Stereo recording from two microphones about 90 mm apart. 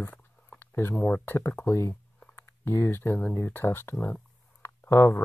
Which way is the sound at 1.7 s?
30° left (ahead or behind).